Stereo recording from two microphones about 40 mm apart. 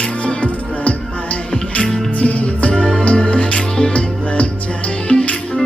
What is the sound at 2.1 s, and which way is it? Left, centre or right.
Music, left.